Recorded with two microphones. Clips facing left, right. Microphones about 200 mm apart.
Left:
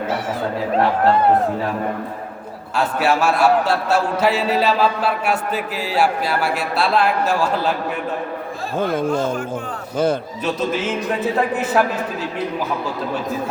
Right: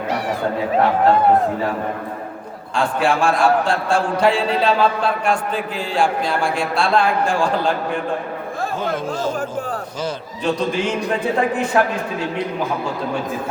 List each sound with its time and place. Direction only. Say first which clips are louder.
2.7 s a man's voice: even; 5° left (ahead or behind)
8.8 s speech: left 5 dB; 55° left (ahead or behind)
10.4 s a man's voice: right 3 dB; 5° left (ahead or behind)